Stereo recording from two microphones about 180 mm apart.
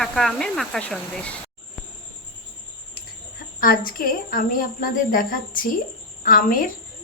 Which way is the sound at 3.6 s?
50° left (ahead or behind).